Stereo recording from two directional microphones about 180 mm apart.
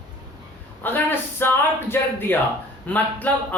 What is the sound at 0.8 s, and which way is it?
Speech, 10° left (ahead or behind).